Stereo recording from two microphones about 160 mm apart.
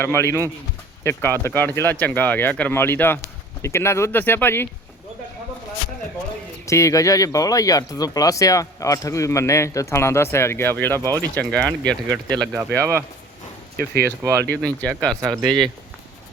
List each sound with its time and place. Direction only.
0.0 s speech: 15° left (ahead or behind)
6.7 s speech: 20° left (ahead or behind)
12.4 s speech: 15° right (ahead or behind)
13.7 s speech: 80° right
14.6 s speech: 5° left (ahead or behind)
15.1 s speech: 20° right (ahead or behind)